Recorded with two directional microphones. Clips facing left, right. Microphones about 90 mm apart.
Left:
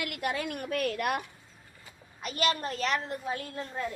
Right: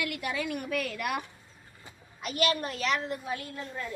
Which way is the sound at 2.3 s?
35° left (ahead or behind).